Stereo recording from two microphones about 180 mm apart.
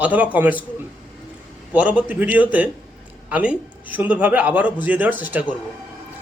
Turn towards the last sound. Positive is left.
turn(degrees=-10)  # may be behind; listen again after turning